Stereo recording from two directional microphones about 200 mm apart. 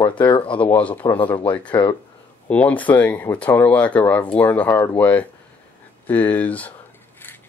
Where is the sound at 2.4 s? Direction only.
5° left (ahead or behind).